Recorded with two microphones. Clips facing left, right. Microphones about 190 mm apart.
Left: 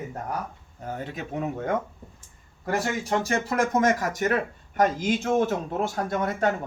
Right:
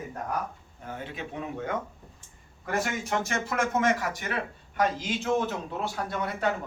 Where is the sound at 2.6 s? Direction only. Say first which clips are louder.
Left 3 dB; 35° left (ahead or behind).